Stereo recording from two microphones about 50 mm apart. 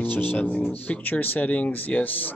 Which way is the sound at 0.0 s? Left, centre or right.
Left.